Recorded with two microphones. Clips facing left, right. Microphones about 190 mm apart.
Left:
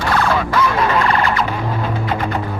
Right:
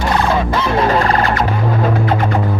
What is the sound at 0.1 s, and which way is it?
Music, 20° right (ahead or behind).